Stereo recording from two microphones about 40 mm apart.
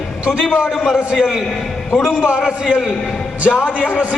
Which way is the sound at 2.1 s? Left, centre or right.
Right.